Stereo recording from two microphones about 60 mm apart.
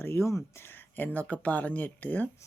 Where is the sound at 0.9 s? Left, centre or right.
Left.